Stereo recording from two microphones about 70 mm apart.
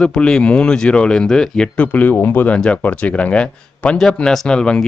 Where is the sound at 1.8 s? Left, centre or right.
Left.